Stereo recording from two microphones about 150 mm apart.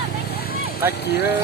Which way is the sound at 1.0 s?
90° left.